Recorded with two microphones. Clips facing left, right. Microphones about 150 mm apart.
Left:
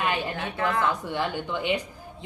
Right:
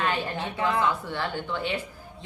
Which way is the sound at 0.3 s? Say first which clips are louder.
Even; 20° right (ahead or behind).